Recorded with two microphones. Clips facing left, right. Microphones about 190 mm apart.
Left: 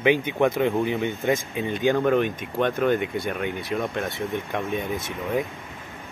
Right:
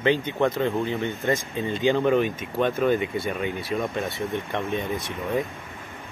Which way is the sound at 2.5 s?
Centre (ahead or behind).